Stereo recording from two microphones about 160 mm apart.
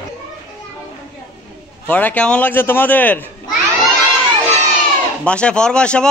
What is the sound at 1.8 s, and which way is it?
A man's voice, 10° left (ahead or behind).